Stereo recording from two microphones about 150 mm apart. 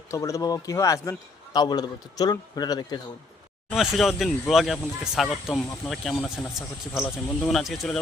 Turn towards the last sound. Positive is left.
turn(degrees=0)  # may be behind; listen again after turning